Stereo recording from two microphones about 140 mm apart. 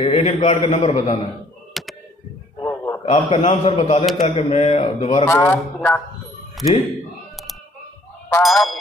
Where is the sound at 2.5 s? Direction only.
15° left (ahead or behind).